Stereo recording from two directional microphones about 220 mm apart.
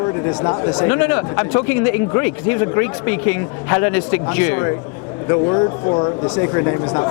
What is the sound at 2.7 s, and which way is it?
Speech, 15° left (ahead or behind).